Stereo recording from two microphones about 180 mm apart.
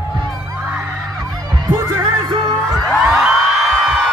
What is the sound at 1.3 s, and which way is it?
Music, 20° right (ahead or behind).